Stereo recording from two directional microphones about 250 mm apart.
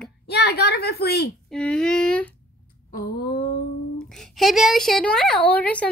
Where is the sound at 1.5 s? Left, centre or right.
Centre.